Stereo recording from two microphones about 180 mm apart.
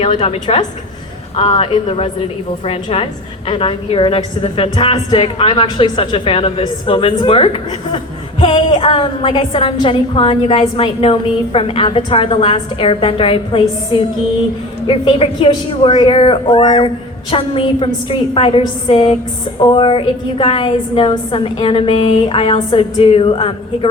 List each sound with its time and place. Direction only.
0.0 s a woman's voice: 30° left (ahead or behind)
14.8 s a woman's voice: 30° left (ahead or behind)